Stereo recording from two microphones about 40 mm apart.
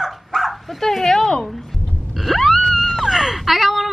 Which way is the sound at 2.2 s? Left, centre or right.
Centre.